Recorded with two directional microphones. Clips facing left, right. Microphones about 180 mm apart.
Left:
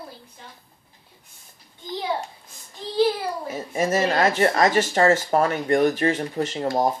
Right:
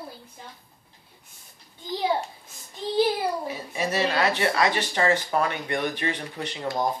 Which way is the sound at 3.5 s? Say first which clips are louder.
Left 5 dB; 45° left (ahead or behind).